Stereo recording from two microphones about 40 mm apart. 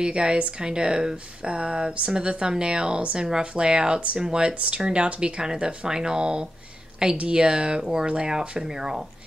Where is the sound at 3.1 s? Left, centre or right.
Centre.